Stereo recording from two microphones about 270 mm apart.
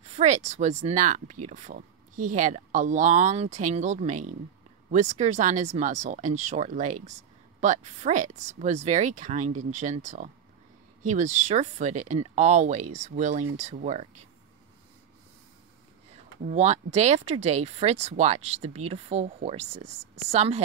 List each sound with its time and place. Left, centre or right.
0.0 s speech: right
16.4 s speech: right